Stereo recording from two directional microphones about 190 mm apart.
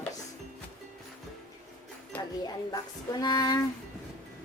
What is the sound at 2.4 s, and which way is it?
A woman's voice, 20° left (ahead or behind).